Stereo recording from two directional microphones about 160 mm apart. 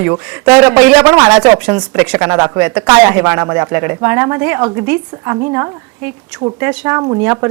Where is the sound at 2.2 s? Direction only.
20° right (ahead or behind).